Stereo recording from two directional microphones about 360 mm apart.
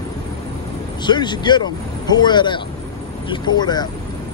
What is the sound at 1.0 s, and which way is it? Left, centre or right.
Speech, centre.